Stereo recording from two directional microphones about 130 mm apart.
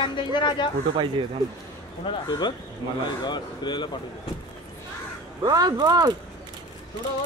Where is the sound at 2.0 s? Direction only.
35° left (ahead or behind).